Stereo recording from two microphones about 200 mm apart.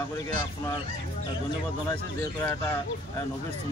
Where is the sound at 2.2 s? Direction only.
15° left (ahead or behind).